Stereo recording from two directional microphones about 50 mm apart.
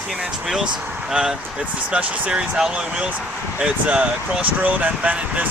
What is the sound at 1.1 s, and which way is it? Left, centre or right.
Speech, centre.